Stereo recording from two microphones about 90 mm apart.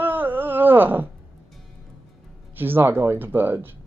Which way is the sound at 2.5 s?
25° right (ahead or behind).